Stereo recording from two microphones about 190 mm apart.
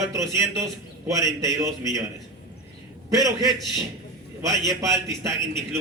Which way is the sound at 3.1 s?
20° right (ahead or behind).